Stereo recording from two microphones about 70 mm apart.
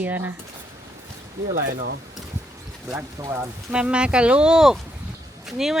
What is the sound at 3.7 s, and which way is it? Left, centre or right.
A woman's voice, centre.